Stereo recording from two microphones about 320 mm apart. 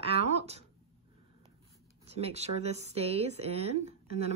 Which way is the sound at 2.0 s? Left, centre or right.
Centre.